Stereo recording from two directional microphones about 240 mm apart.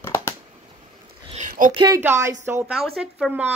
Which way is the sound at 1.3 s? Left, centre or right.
Right.